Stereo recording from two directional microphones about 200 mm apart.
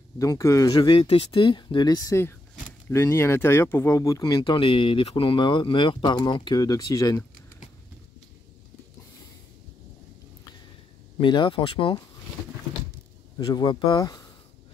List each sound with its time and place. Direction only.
0.2 s speech: 15° left (ahead or behind)
11.1 s speech: 25° left (ahead or behind)
13.4 s speech: 20° left (ahead or behind)